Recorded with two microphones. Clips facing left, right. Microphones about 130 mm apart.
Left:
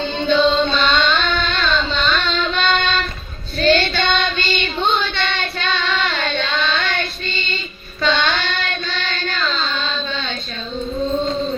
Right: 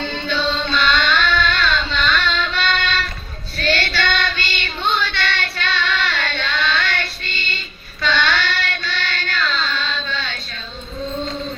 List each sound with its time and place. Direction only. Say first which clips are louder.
0.0 s music: left 6 dB; 20° left (ahead or behind)
0.6 s a sound: left 2 dB; 20° left (ahead or behind)
3.6 s child singing: left 5 dB; 20° left (ahead or behind)